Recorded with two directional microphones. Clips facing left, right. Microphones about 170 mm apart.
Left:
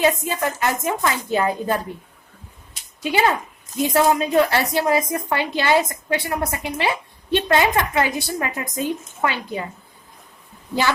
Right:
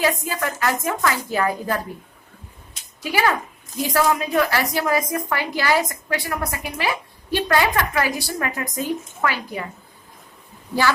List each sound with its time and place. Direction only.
0.0 s a woman's voice: 20° left (ahead or behind)
3.0 s a woman's voice: 25° left (ahead or behind)